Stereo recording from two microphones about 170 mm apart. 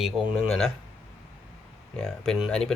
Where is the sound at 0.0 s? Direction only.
5° right (ahead or behind).